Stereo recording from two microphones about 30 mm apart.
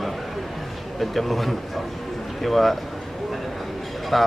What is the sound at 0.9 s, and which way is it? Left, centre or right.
A man's voice, centre.